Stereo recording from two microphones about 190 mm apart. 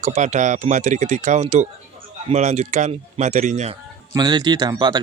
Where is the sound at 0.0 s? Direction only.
40° right (ahead or behind).